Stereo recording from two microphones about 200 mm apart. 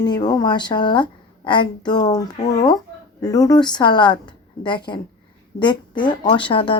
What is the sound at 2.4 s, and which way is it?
Speech, 35° left (ahead or behind).